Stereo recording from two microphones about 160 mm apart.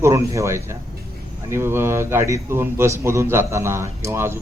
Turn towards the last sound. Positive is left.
turn(degrees=-15)  # may be behind; listen again after turning